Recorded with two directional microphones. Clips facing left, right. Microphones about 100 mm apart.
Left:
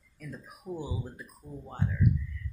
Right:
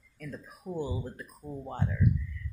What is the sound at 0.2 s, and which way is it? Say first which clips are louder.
Speech: right 2 dB; 15° left (ahead or behind).